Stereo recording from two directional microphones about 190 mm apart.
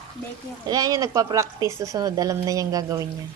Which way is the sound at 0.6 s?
20° right (ahead or behind).